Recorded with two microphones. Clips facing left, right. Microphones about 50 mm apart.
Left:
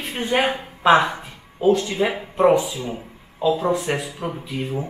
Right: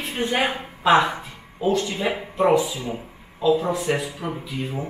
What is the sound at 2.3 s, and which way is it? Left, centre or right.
Speech, left.